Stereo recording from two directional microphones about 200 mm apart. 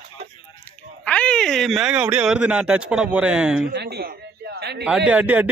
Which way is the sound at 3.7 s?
55° right (ahead or behind).